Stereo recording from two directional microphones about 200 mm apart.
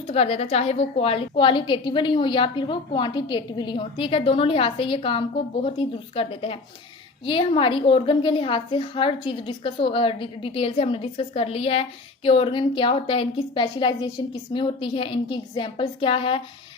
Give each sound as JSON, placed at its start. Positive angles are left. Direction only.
{"t": 0.1, "sound": "a woman's voice", "side_deg": 30}